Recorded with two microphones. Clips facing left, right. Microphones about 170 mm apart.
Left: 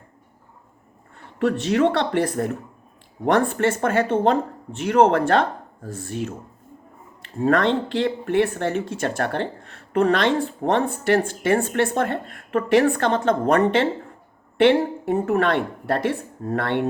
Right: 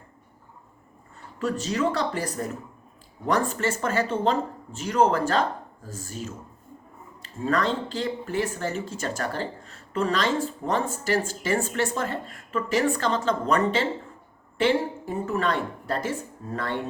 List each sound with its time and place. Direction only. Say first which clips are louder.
1.4 s speech: left 7 dB; 65° left (ahead or behind)